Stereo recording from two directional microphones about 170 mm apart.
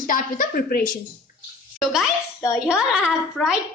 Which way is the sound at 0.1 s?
55° left (ahead or behind).